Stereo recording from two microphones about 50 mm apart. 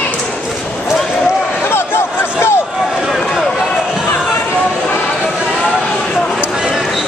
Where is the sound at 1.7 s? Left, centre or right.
Left.